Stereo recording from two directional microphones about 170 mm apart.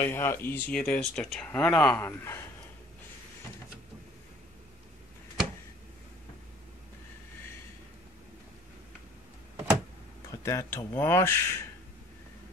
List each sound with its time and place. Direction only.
0.0 s speech: 15° left (ahead or behind)
10.4 s speech: 15° left (ahead or behind)